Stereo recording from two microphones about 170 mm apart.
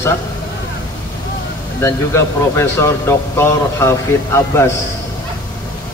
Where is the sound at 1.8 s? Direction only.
15° left (ahead or behind).